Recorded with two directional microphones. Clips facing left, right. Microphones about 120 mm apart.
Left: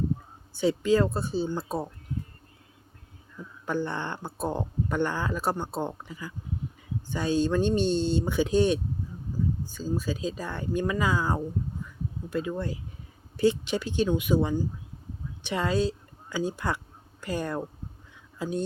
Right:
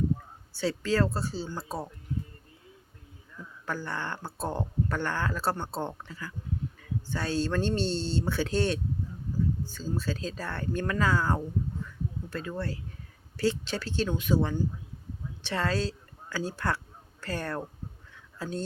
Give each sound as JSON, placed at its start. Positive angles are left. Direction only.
{"t": 0.5, "sound": "speech", "side_deg": 15}
{"t": 3.7, "sound": "speech", "side_deg": 20}